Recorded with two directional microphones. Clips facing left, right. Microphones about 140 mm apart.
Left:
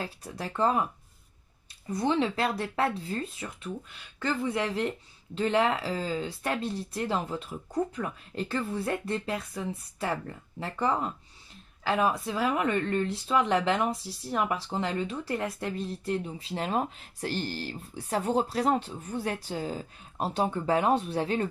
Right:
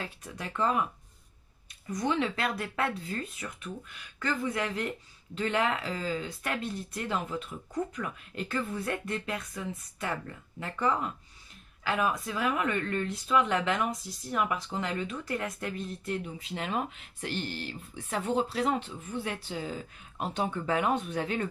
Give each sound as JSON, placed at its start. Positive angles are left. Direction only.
{"t": 0.0, "sound": "speech", "side_deg": 35}
{"t": 1.9, "sound": "speech", "side_deg": 30}